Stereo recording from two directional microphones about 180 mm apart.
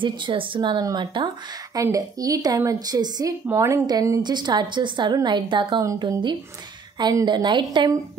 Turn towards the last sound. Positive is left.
turn(degrees=-20)  # may be behind; listen again after turning